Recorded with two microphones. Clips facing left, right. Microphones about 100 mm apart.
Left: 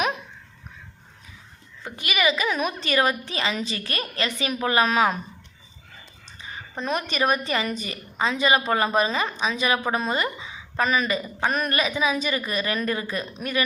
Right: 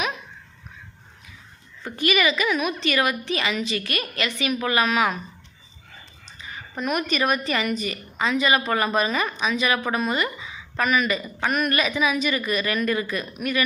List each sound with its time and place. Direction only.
1.8 s a woman's voice: 20° left (ahead or behind); by 5.2 s 35° left (ahead or behind)
6.4 s a woman's voice: 25° left (ahead or behind)